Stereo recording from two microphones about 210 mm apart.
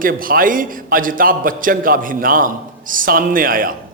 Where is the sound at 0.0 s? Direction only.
40° right (ahead or behind).